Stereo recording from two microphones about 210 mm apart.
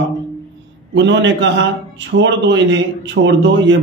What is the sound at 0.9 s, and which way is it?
A man's voice, 60° right (ahead or behind).